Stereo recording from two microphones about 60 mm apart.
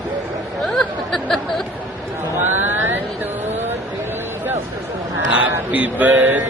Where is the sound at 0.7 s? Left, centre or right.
Centre.